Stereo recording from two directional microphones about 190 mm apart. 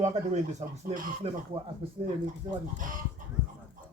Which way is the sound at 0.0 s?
35° right (ahead or behind).